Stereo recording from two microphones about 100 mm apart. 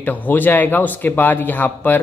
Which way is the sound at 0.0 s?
15° left (ahead or behind).